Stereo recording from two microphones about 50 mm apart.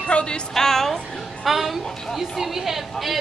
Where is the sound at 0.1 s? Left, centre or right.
Left.